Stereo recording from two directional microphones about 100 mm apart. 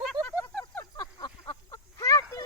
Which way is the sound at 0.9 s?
45° left (ahead or behind).